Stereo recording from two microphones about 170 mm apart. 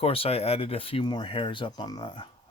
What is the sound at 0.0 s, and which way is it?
Speech, 35° left (ahead or behind).